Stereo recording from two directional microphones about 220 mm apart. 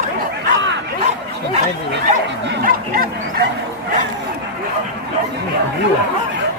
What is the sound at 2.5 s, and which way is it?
Speech, 40° right (ahead or behind).